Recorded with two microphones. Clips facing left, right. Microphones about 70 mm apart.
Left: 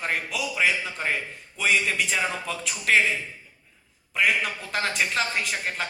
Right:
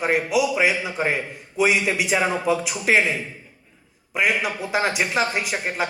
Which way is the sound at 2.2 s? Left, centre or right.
Right.